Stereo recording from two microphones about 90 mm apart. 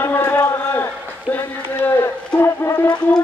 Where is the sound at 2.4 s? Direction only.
25° left (ahead or behind).